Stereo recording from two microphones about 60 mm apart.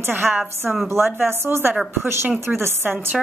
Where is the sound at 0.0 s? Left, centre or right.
Right.